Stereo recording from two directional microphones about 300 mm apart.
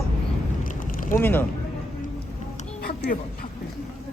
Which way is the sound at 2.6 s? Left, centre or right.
Left.